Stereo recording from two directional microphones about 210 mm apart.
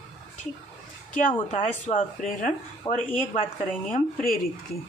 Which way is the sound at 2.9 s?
20° left (ahead or behind).